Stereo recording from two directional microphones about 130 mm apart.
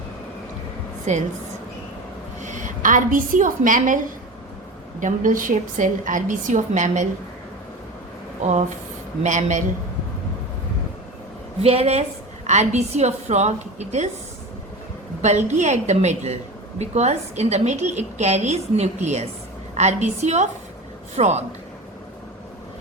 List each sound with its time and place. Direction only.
1.1 s a woman's voice: 65° right (ahead or behind)
2.4 s a woman's voice: 75° right (ahead or behind)
9.2 s a woman's voice: 70° right (ahead or behind)
11.6 s a woman's voice: 50° right (ahead or behind)
15.2 s a woman's voice: 65° right (ahead or behind)